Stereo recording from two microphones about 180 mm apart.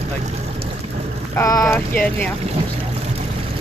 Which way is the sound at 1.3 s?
20° left (ahead or behind).